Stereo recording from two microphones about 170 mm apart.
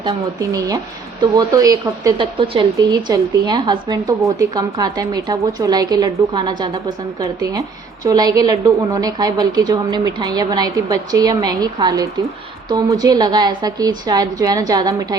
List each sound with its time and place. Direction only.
1.2 s a woman's voice: 20° right (ahead or behind)
8.0 s a woman's voice: 20° right (ahead or behind)